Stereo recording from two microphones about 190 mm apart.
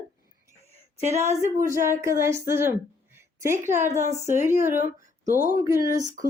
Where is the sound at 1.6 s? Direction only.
15° right (ahead or behind).